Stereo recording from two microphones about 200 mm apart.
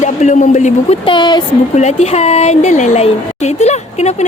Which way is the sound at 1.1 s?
20° left (ahead or behind).